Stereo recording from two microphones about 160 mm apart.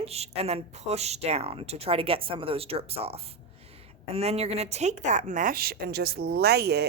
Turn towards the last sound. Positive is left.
turn(degrees=-90)